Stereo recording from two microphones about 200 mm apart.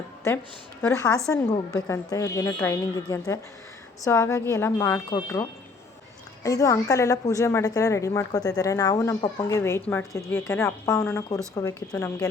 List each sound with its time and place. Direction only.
0.8 s a woman's voice: 15° left (ahead or behind)